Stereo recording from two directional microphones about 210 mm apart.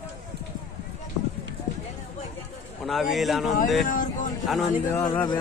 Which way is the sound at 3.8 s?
40° left (ahead or behind).